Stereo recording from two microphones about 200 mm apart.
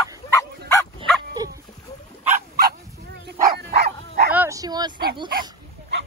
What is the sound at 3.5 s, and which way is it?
Dog, 55° right (ahead or behind).